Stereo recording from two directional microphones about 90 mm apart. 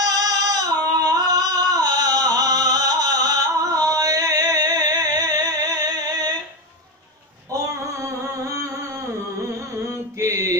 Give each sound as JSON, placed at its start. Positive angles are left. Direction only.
{"t": 0.0, "sound": "singing", "side_deg": -45}
{"t": 7.5, "sound": "music", "side_deg": -35}
{"t": 9.8, "sound": "mantra", "side_deg": -35}